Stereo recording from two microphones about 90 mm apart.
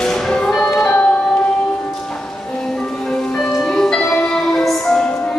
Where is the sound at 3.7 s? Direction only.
10° left (ahead or behind).